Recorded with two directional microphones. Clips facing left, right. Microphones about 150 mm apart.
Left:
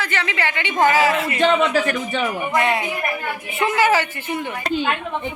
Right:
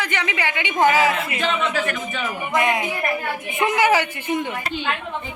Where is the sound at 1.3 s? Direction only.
35° left (ahead or behind).